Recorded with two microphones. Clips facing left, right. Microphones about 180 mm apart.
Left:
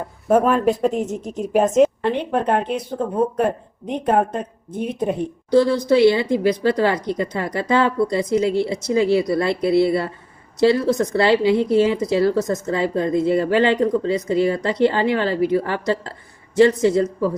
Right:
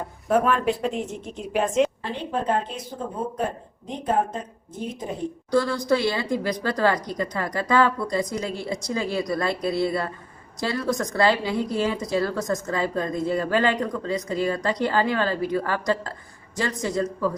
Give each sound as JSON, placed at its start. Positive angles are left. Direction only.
{"t": 0.3, "sound": "a woman's voice", "side_deg": 40}
{"t": 2.0, "sound": "speech", "side_deg": 65}
{"t": 5.5, "sound": "speech", "side_deg": 20}